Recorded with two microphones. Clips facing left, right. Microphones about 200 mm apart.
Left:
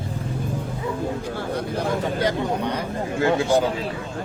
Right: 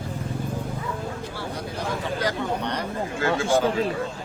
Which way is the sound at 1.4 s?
55° left (ahead or behind).